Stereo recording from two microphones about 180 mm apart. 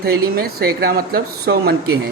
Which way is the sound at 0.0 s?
60° right (ahead or behind).